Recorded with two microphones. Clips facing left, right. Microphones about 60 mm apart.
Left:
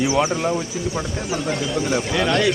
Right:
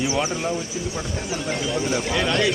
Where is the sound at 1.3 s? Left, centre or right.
Left.